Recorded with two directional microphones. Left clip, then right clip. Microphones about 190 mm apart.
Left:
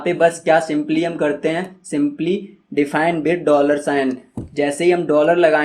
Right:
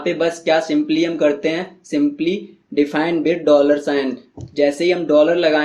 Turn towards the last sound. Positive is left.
turn(degrees=30)  # may be behind; listen again after turning